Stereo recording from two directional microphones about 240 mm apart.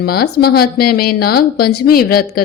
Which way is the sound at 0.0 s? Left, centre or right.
Left.